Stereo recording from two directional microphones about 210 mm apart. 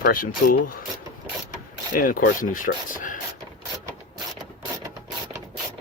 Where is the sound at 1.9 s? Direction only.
40° left (ahead or behind).